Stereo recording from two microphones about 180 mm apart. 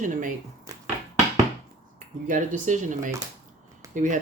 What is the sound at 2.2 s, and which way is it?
Speech, 45° right (ahead or behind).